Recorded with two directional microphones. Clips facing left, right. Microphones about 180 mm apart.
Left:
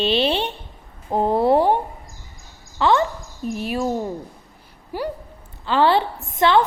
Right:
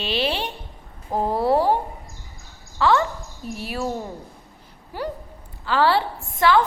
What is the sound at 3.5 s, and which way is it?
Speech, 20° left (ahead or behind).